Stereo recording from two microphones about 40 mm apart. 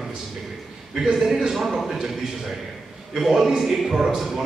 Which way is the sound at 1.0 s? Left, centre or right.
Centre.